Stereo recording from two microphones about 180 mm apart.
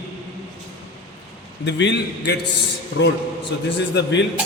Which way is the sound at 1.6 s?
75° left (ahead or behind).